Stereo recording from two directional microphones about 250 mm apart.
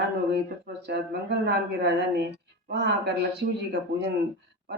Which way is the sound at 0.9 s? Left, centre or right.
Right.